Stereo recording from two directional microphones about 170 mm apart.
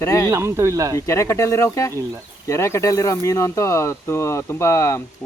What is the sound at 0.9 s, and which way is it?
Speech, 15° left (ahead or behind).